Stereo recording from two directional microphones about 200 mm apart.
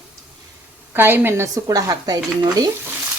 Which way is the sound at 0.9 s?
10° right (ahead or behind).